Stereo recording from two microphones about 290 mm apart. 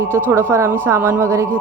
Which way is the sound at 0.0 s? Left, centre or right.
Centre.